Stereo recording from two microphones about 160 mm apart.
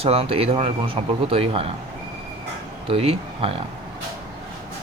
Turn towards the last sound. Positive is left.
turn(degrees=-35)  # may be behind; listen again after turning